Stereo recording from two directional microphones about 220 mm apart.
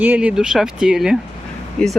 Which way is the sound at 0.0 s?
5° right (ahead or behind).